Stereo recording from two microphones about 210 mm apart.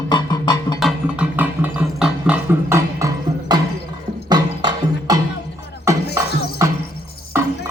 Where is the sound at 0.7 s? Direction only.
5° right (ahead or behind).